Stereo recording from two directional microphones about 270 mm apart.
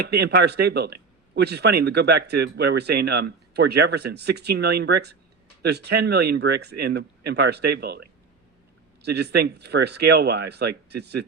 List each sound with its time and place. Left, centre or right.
0.0 s speech: right